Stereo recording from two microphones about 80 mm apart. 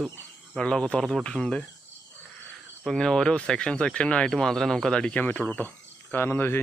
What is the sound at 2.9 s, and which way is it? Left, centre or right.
Speech, centre.